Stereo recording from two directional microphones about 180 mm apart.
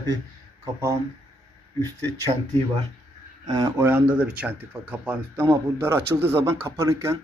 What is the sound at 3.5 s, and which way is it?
Speech, 25° right (ahead or behind).